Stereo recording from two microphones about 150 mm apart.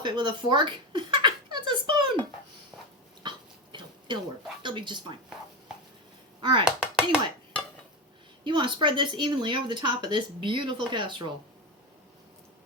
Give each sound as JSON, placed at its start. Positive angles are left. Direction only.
{"t": 0.0, "sound": "a sound", "side_deg": -30}
{"t": 3.2, "sound": "a sound", "side_deg": -30}
{"t": 4.6, "sound": "speech", "side_deg": -30}
{"t": 6.4, "sound": "speech", "side_deg": -30}
{"t": 6.7, "sound": "chopping", "side_deg": -5}
{"t": 8.4, "sound": "a woman's voice", "side_deg": -30}